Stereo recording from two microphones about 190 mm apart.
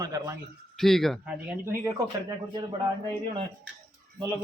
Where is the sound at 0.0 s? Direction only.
15° right (ahead or behind).